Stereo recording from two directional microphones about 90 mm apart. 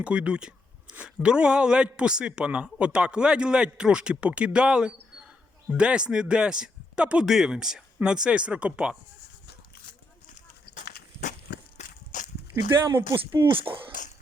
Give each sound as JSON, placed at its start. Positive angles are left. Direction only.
{"t": 0.0, "sound": "speech", "side_deg": -10}
{"t": 12.5, "sound": "speech", "side_deg": -35}
{"t": 13.5, "sound": "speech", "side_deg": -75}